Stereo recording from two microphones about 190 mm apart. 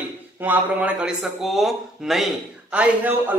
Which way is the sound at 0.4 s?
10° right (ahead or behind).